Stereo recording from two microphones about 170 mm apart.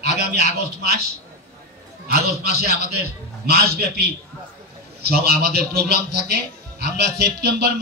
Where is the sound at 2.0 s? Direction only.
65° right (ahead or behind).